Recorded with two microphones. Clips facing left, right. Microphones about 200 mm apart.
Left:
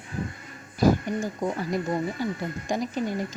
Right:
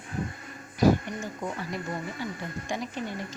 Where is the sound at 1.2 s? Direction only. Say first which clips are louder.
Left 6 dB; 40° left (ahead or behind).